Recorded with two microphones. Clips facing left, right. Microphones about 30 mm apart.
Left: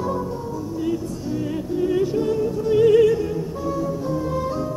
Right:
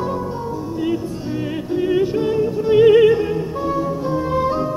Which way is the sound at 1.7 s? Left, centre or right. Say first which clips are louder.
Right 3 dB; right.